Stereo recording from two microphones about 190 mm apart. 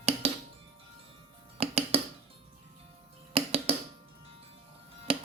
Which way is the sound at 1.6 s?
30° right (ahead or behind).